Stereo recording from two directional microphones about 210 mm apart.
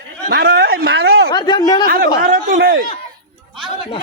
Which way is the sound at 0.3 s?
50° right (ahead or behind).